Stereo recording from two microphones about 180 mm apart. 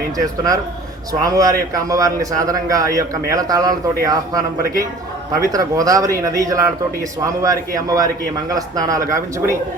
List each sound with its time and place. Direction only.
1.2 s a man's voice: 20° right (ahead or behind)